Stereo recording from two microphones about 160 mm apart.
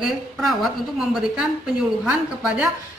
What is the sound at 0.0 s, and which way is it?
A woman's voice, centre (ahead or behind).